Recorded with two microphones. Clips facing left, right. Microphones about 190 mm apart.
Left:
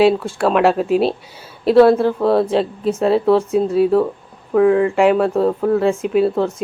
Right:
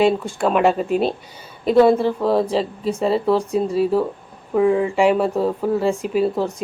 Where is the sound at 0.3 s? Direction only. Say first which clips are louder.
Left 2 dB; centre (ahead or behind).